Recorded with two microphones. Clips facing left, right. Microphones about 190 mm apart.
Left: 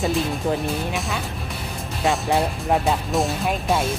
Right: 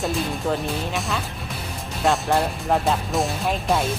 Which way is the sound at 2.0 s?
Centre (ahead or behind).